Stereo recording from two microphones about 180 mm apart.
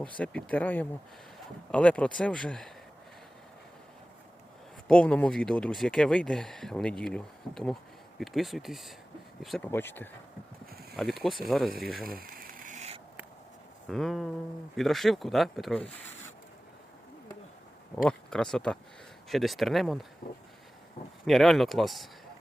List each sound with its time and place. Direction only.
0.0 s speech: 5° left (ahead or behind)
4.9 s speech: 5° left (ahead or behind)
9.7 s speech: 10° left (ahead or behind)
10.9 s speech: centre (ahead or behind)
12.0 s a sound: 55° right (ahead or behind)
13.9 s speech: centre (ahead or behind)
17.9 s speech: 5° left (ahead or behind)
21.2 s speech: centre (ahead or behind)